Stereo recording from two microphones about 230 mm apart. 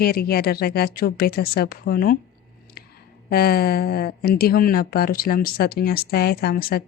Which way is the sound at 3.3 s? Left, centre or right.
Left.